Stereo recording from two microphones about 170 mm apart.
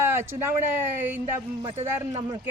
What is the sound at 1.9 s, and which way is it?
Speech, 15° right (ahead or behind).